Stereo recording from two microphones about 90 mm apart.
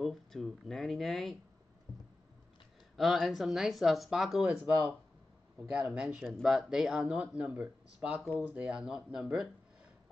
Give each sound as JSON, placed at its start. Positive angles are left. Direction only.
{"t": 0.0, "sound": "speech", "side_deg": 0}
{"t": 1.9, "sound": "boat", "side_deg": 45}
{"t": 3.0, "sound": "speech", "side_deg": 0}